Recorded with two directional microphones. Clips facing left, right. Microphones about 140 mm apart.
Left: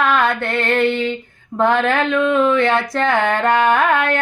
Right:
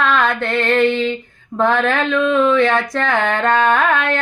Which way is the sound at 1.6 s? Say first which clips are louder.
Even; 15° left (ahead or behind).